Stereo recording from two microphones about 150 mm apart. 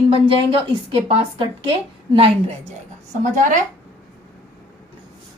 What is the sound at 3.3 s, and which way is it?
Speech, 55° right (ahead or behind).